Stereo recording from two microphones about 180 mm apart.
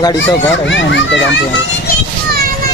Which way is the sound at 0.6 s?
90° left.